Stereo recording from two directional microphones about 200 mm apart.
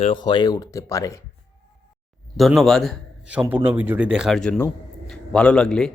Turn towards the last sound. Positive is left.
turn(degrees=5)  # may be behind; listen again after turning